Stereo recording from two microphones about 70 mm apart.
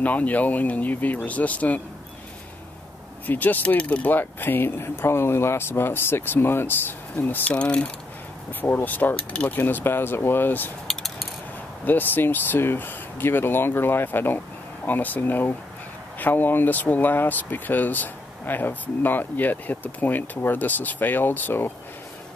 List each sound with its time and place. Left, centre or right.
0.0 s speech: left
3.3 s speech: left
8.5 s speech: left
10.9 s a sound: centre
11.8 s speech: left